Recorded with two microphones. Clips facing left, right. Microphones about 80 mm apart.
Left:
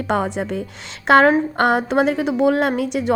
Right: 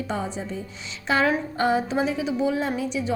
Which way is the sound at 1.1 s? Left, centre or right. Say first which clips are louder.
Left 9 dB; left.